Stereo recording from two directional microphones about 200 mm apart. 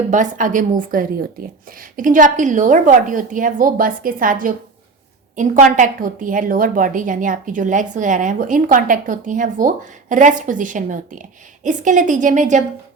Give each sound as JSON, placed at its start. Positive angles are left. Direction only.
{"t": 0.1, "sound": "a woman's voice", "side_deg": -40}